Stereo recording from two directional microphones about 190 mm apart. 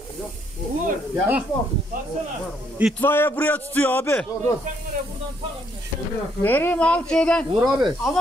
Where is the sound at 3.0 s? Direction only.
10° left (ahead or behind).